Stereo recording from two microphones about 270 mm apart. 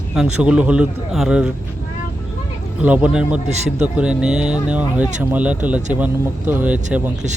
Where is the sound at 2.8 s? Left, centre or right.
Centre.